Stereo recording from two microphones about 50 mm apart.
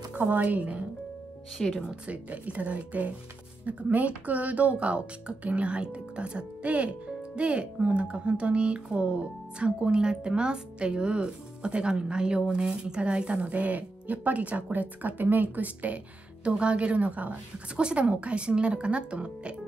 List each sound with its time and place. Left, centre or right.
0.2 s speech: right
1.6 s speech: centre
2.0 s speech: right